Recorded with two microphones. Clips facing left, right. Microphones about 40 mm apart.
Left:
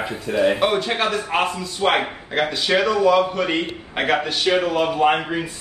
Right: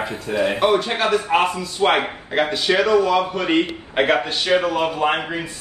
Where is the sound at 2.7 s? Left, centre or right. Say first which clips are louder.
Right 1 dB; centre.